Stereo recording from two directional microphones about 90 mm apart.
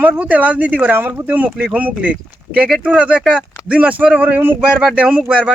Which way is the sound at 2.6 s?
Centre (ahead or behind).